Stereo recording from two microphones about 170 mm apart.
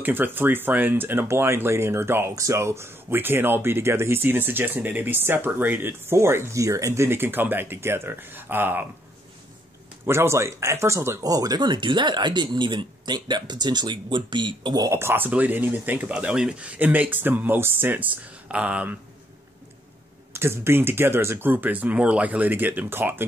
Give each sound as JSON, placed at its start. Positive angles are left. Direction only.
{"t": 0.0, "sound": "speech", "side_deg": -10}
{"t": 10.0, "sound": "speech", "side_deg": -15}
{"t": 20.3, "sound": "speech", "side_deg": -15}